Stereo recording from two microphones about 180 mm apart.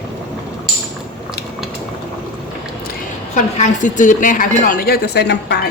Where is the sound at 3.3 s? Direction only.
45° left (ahead or behind).